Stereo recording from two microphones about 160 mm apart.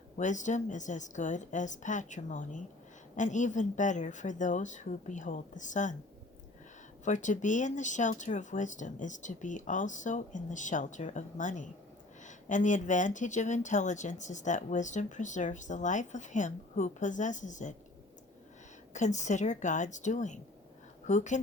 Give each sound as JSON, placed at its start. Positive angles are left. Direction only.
{"t": 0.2, "sound": "speech", "side_deg": 50}
{"t": 7.0, "sound": "speech", "side_deg": 50}
{"t": 18.9, "sound": "speech", "side_deg": 50}